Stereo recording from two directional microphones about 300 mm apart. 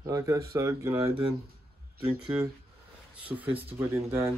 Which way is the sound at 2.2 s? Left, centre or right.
Centre.